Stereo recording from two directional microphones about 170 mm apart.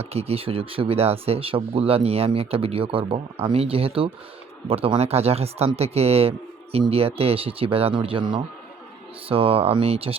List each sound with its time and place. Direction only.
0.0 s speech: 35° right (ahead or behind)